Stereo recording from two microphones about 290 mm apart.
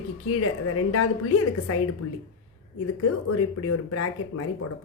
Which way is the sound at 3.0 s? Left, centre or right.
Left.